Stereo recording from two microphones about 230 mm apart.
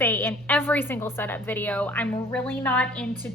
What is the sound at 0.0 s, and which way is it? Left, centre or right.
A woman's voice, centre.